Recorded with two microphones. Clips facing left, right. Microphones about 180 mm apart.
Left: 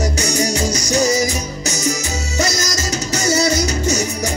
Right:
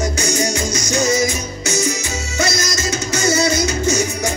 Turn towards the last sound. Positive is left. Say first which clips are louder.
# right 1 dB
turn(degrees=35)  # may be behind; listen again after turning